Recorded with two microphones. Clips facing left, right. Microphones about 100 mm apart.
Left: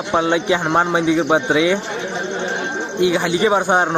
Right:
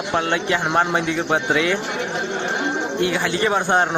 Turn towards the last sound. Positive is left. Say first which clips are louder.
# left 3 dB
turn(degrees=15)  # may be behind; listen again after turning